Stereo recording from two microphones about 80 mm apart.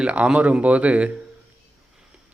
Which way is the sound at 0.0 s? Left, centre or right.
Centre.